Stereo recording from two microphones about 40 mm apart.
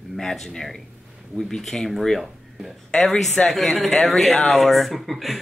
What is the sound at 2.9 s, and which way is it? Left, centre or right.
Speech, centre.